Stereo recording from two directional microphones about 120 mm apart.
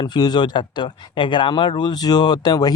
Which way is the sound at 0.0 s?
35° left (ahead or behind).